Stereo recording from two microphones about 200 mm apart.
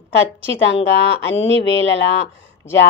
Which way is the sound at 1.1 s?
60° left (ahead or behind).